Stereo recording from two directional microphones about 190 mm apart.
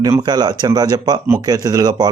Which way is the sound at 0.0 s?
20° right (ahead or behind).